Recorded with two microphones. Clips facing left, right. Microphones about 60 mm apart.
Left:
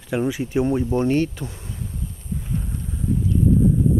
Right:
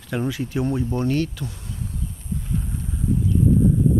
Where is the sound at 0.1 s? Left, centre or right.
Centre.